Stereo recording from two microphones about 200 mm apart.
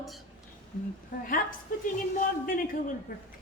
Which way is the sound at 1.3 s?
45° left (ahead or behind).